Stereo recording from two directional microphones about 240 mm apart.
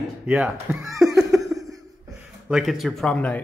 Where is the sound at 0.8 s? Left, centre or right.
Centre.